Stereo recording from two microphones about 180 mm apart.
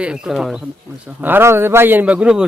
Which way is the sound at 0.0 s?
5° right (ahead or behind).